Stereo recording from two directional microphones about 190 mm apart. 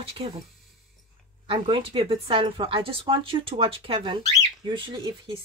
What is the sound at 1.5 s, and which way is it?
Speech, 30° right (ahead or behind).